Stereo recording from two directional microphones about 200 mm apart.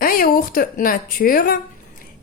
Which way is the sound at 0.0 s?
45° left (ahead or behind).